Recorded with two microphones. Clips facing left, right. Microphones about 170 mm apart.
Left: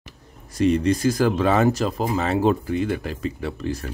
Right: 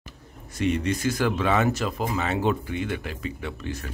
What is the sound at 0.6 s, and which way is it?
Speech, 35° left (ahead or behind).